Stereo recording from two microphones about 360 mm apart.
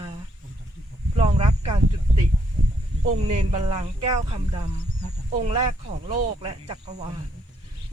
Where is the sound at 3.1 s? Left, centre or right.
Centre.